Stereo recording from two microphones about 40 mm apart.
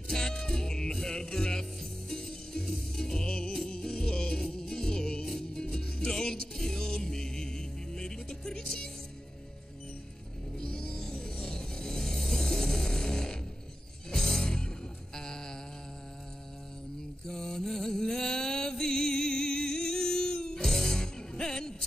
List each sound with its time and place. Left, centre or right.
0.1 s music: centre
5.2 s music: centre
10.6 s music: left
17.3 s music: centre